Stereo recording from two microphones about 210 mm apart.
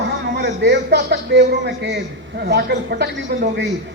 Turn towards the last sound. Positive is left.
turn(degrees=-55)  # may be behind; listen again after turning